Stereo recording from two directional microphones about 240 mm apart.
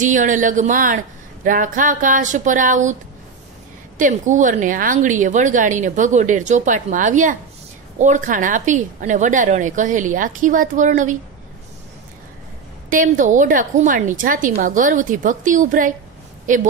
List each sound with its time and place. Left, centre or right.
0.0 s a woman's voice: right
4.0 s a woman's voice: right
12.9 s a woman's voice: right